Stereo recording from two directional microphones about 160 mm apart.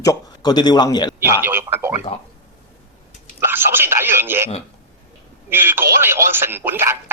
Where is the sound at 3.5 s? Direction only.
15° right (ahead or behind).